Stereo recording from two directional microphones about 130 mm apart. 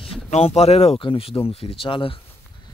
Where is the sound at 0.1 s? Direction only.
50° left (ahead or behind).